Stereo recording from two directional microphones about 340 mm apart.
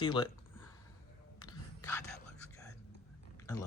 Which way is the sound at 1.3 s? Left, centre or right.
Centre.